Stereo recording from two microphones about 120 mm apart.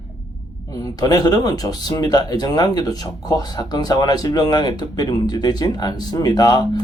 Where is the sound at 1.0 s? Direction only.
30° left (ahead or behind).